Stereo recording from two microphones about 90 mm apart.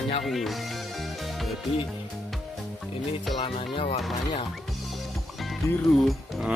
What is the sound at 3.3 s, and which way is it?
Music, 75° left (ahead or behind).